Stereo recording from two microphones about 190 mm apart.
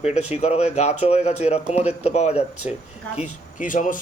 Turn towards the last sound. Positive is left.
turn(degrees=45)  # may be behind; listen again after turning